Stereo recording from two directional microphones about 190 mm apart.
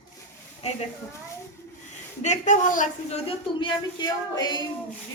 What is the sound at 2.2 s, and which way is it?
Speech, 40° left (ahead or behind).